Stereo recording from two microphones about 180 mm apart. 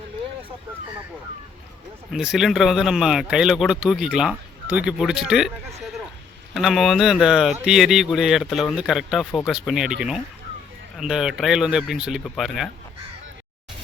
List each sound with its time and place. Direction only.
2.1 s speech: centre (ahead or behind)